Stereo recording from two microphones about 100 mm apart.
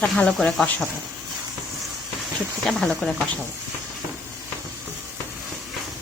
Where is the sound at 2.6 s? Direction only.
5° left (ahead or behind).